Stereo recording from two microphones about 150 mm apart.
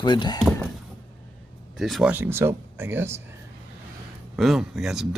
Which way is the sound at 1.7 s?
Centre (ahead or behind).